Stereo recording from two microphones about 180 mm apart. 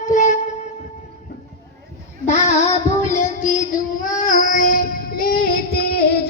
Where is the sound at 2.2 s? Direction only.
40° left (ahead or behind); by 6.0 s 60° left (ahead or behind).